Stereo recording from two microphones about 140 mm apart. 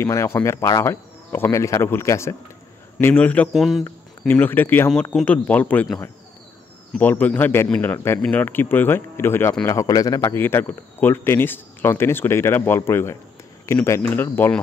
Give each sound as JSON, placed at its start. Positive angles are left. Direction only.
{"t": 0.0, "sound": "speech", "side_deg": 20}
{"t": 3.5, "sound": "speech", "side_deg": 0}
{"t": 4.3, "sound": "speech", "side_deg": 15}
{"t": 7.0, "sound": "speech", "side_deg": 10}